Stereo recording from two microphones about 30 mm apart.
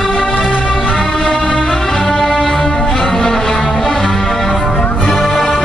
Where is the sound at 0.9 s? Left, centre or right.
Centre.